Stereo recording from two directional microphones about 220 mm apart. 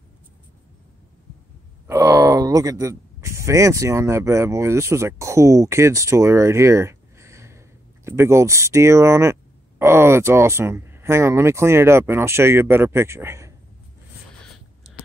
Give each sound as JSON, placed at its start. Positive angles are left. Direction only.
{"t": 1.9, "sound": "speech", "side_deg": -15}